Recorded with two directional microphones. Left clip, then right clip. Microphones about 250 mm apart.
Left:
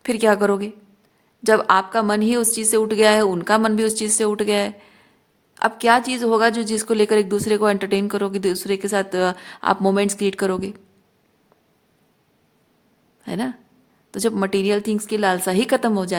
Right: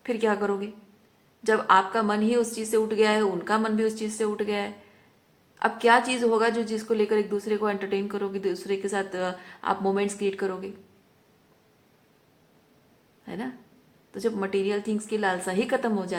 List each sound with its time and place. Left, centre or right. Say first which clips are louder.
0.0 s a woman's voice: left 8 dB; left
13.2 s a woman's voice: left 9 dB; left